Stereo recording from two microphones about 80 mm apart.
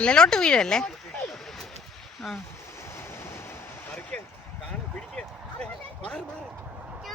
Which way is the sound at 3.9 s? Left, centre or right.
Centre.